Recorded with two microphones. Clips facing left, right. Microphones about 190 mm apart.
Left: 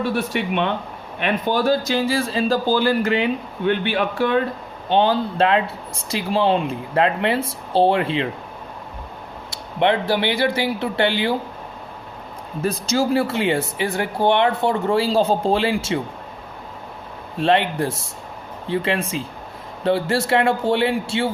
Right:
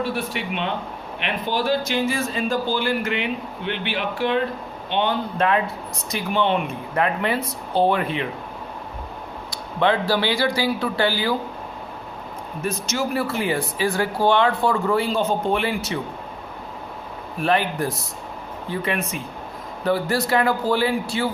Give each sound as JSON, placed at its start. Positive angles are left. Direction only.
{"t": 0.3, "sound": "speech", "side_deg": 55}
{"t": 1.2, "sound": "speech", "side_deg": 45}
{"t": 3.7, "sound": "speech", "side_deg": 50}
{"t": 4.9, "sound": "speech", "side_deg": 35}
{"t": 9.5, "sound": "speech", "side_deg": 20}
{"t": 12.6, "sound": "speech", "side_deg": 30}
{"t": 17.3, "sound": "speech", "side_deg": 25}